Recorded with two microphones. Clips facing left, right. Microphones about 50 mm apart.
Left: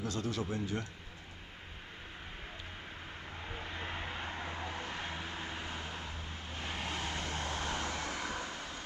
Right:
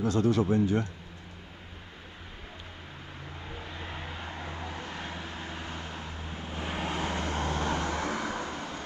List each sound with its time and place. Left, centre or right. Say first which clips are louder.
0.0 s speech: right 11 dB; centre
3.5 s vehicle: even; left; by 6.1 s centre
6.1 s vehicle: right 5 dB; right